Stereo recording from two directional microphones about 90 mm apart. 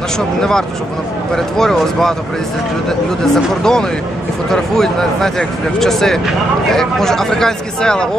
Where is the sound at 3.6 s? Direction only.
5° left (ahead or behind).